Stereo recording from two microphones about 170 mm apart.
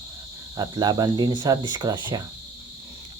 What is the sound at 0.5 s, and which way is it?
Speech, 25° right (ahead or behind).